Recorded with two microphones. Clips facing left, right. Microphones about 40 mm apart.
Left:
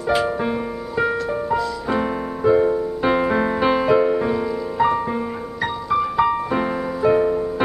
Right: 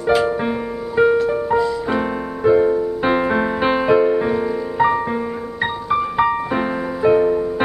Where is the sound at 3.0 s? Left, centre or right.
Centre.